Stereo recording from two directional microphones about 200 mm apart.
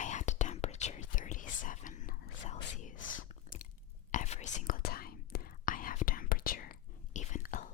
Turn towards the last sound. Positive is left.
turn(degrees=40)  # may be behind; listen again after turning